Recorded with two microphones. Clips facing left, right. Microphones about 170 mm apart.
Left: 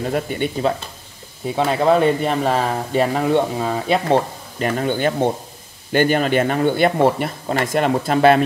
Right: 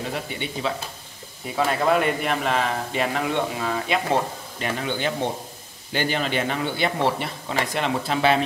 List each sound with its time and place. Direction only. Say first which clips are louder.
0.1 s speech: left 8 dB; 50° left (ahead or behind)
1.5 s speech: left 5 dB; 25° left (ahead or behind)
4.6 s speech: left 7 dB; 45° left (ahead or behind)